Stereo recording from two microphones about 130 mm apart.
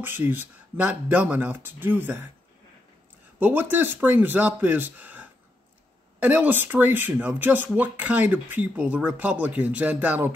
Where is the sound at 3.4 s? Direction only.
15° right (ahead or behind).